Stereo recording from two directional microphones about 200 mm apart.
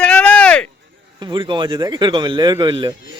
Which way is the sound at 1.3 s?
25° right (ahead or behind).